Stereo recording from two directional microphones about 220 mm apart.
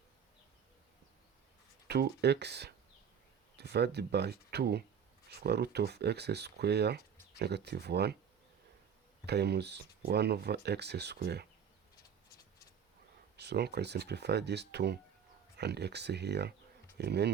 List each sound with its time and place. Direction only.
1.9 s speech: 50° right (ahead or behind)
9.2 s speech: 50° right (ahead or behind)
13.3 s speech: 50° right (ahead or behind)